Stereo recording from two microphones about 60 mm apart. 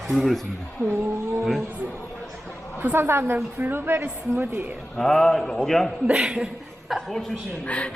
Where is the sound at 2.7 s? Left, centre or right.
Right.